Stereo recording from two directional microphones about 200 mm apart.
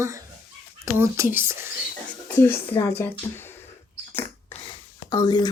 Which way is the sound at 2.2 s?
10° left (ahead or behind).